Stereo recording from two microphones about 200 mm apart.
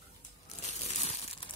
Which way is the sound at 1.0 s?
30° left (ahead or behind).